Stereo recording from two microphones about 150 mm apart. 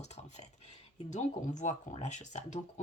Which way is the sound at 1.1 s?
50° left (ahead or behind).